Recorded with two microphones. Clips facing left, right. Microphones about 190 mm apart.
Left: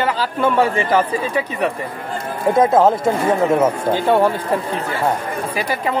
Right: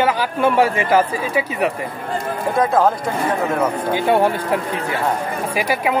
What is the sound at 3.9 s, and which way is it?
Speech, 15° right (ahead or behind).